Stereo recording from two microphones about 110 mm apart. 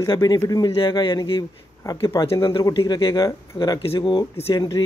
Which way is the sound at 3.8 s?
55° left (ahead or behind).